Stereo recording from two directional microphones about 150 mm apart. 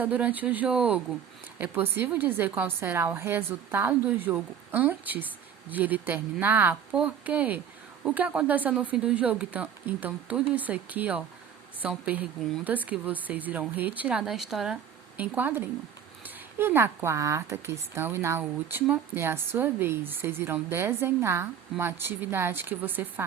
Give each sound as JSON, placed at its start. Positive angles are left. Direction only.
{"t": 0.0, "sound": "a woman's voice", "side_deg": -10}